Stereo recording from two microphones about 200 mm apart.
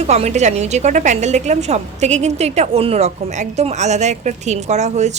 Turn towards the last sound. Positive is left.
turn(degrees=-35)  # may be behind; listen again after turning